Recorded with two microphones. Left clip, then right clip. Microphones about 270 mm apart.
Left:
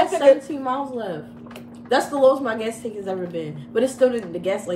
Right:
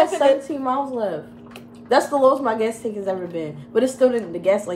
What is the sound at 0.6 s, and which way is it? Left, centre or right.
A woman's voice, centre.